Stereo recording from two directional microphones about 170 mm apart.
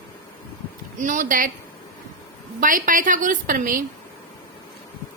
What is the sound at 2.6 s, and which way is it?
A woman's voice, 50° right (ahead or behind).